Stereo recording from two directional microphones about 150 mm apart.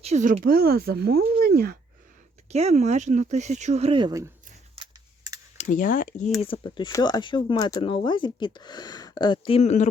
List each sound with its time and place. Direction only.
0.0 s speech: 50° right (ahead or behind); by 1.7 s 90° right
2.5 s speech: 45° right (ahead or behind)
4.8 s computer keyboard: 25° right (ahead or behind)
5.6 s speech: 60° left (ahead or behind)
6.4 s speech: 35° left (ahead or behind)
7.8 s speech: 35° left (ahead or behind); by 9.9 s 50° left (ahead or behind)